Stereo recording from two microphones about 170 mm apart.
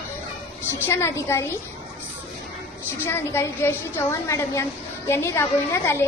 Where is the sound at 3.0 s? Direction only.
15° left (ahead or behind).